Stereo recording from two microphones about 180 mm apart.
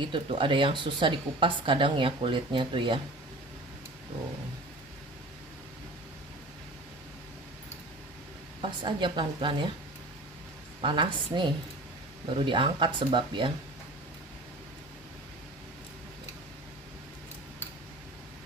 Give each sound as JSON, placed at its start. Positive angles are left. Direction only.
{"t": 0.1, "sound": "speech", "side_deg": -30}
{"t": 8.5, "sound": "speech", "side_deg": -25}
{"t": 10.8, "sound": "speech", "side_deg": -25}